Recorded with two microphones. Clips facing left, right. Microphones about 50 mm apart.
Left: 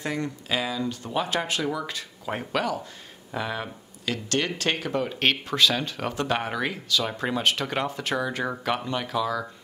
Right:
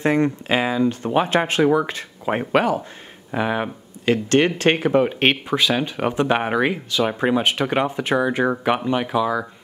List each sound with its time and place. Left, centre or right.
0.0 s speech: right; by 9.5 s centre